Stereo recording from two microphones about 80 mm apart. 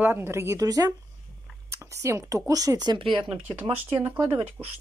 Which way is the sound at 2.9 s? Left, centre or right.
Right.